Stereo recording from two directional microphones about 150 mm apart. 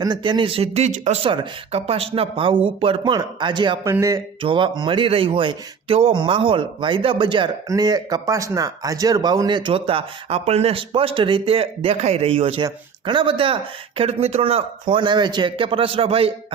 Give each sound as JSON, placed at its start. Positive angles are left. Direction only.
{"t": 0.0, "sound": "speech", "side_deg": -30}
{"t": 1.2, "sound": "speech", "side_deg": -35}